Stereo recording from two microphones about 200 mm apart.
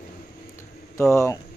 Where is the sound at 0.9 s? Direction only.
15° left (ahead or behind).